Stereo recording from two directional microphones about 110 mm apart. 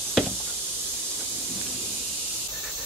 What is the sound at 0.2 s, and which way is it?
Knock, 5° right (ahead or behind).